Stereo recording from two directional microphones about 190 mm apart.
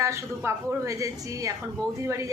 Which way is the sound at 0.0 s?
15° right (ahead or behind).